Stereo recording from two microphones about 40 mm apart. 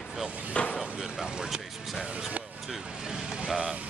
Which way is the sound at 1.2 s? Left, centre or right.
Centre.